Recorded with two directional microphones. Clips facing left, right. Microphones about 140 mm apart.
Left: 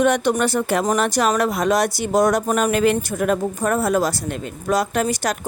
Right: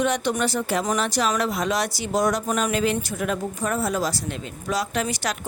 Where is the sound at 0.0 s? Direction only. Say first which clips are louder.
Left 5 dB; 55° left (ahead or behind).